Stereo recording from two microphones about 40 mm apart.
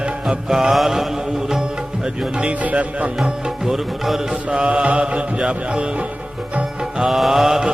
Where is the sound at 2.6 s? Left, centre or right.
Right.